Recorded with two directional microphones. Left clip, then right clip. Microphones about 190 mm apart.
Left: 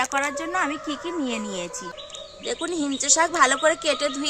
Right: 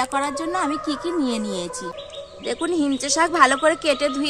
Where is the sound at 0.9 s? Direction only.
25° left (ahead or behind).